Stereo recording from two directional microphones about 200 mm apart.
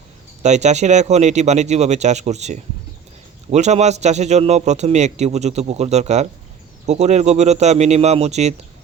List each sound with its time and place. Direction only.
0.4 s a man's voice: 35° right (ahead or behind)